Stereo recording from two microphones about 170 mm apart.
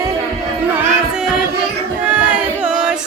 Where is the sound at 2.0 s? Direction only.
10° right (ahead or behind).